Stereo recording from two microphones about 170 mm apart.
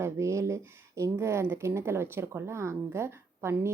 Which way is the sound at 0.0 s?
15° right (ahead or behind).